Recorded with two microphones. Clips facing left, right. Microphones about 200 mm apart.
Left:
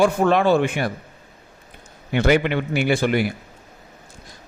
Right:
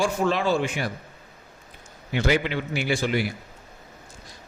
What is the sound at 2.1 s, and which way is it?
A man's voice, 60° left (ahead or behind).